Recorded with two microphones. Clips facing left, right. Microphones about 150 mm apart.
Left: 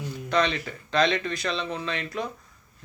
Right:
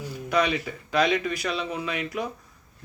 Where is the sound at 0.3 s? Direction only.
10° right (ahead or behind).